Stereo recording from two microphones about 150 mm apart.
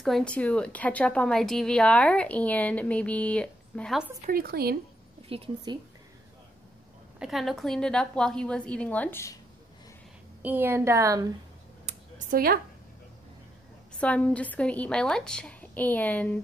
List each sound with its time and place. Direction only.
0.0 s a woman's voice: 5° left (ahead or behind)
4.3 s speech: 85° right
5.3 s a woman's voice: 40° right (ahead or behind)
7.2 s a woman's voice: centre (ahead or behind); by 9.4 s 15° left (ahead or behind)
10.4 s a woman's voice: 15° right (ahead or behind)
11.8 s a sound: 70° right (ahead or behind)
13.9 s a woman's voice: 10° left (ahead or behind)